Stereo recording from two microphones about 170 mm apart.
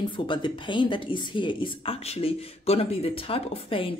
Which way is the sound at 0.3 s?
25° left (ahead or behind).